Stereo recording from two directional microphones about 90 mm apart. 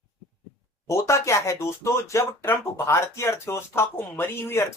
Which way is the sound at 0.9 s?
35° left (ahead or behind).